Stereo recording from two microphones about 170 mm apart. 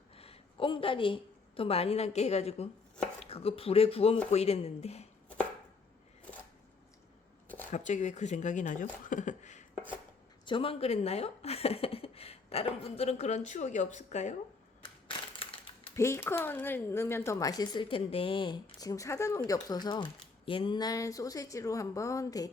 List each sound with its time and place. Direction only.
0.2 s a woman's voice: 35° left (ahead or behind)
7.4 s a sound: 10° left (ahead or behind)
7.7 s speech: 45° left (ahead or behind)
10.4 s speech: 30° left (ahead or behind)
15.0 s a sound: 30° left (ahead or behind)
16.0 s speech: 15° left (ahead or behind)